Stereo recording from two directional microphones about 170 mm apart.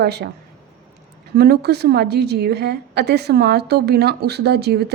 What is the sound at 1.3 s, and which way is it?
A woman's voice, 65° right (ahead or behind).